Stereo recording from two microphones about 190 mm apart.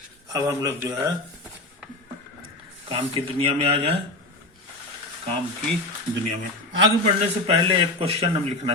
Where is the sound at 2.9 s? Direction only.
30° right (ahead or behind).